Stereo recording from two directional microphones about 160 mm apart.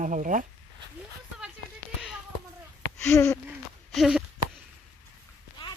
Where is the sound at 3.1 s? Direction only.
15° left (ahead or behind).